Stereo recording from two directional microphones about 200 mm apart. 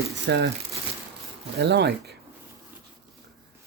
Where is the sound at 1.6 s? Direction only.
55° right (ahead or behind).